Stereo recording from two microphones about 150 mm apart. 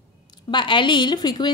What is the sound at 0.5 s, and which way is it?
Speech, 30° left (ahead or behind).